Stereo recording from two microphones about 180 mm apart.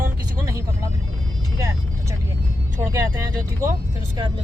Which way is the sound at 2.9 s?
20° right (ahead or behind).